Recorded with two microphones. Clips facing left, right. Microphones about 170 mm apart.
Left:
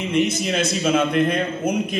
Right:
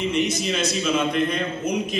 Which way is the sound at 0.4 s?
65° left (ahead or behind).